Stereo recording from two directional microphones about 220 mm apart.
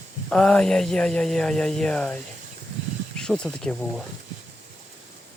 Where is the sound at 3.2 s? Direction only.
5° left (ahead or behind).